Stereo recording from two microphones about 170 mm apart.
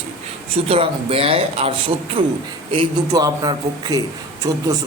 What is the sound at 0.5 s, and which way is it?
A man's voice, 35° right (ahead or behind).